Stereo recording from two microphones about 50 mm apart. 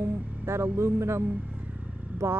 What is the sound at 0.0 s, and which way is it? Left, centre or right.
Vehicle, right.